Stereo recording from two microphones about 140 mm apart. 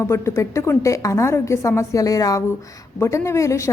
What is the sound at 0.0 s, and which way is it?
A woman's voice, 20° left (ahead or behind).